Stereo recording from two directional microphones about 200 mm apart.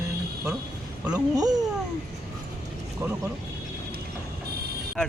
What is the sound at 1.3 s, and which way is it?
Speech, 20° right (ahead or behind).